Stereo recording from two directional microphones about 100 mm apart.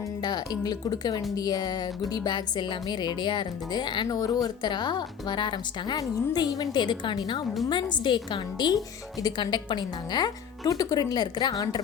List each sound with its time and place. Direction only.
0.2 s speech: 45° left (ahead or behind)
6.0 s speech: 40° left (ahead or behind)